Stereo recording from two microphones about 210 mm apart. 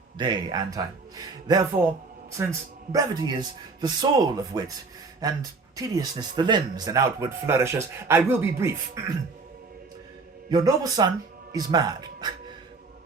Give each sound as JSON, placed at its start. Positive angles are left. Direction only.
{"t": 0.2, "sound": "a man's voice", "side_deg": -20}
{"t": 10.5, "sound": "a man's voice", "side_deg": -20}